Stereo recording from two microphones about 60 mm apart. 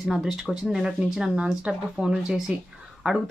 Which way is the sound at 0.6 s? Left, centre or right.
Centre.